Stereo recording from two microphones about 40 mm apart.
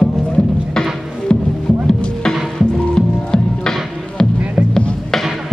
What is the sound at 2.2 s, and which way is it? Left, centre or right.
Music, centre.